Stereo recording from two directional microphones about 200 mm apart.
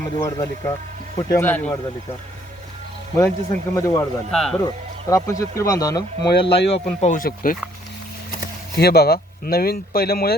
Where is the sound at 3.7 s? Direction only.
15° left (ahead or behind).